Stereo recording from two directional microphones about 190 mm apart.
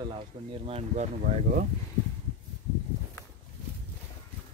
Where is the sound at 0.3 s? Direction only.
25° right (ahead or behind).